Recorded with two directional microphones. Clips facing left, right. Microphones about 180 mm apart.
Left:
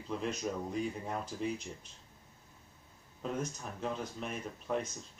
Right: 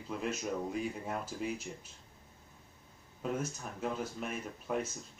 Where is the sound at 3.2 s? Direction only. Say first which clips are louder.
Right 1 dB; 5° right (ahead or behind).